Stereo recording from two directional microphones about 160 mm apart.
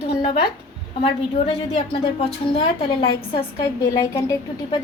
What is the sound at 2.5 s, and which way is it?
A child's voice, 35° left (ahead or behind).